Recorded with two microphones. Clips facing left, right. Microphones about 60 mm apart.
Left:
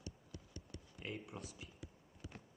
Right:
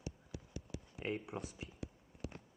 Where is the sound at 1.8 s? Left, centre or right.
Right.